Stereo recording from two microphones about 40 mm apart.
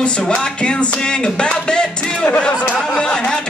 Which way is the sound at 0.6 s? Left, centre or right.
Left.